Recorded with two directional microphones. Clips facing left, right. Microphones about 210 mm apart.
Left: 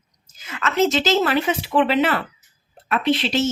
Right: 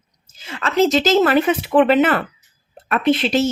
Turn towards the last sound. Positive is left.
turn(degrees=-50)  # may be behind; listen again after turning